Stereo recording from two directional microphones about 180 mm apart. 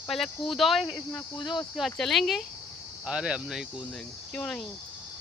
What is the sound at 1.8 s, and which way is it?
Speech, centre (ahead or behind).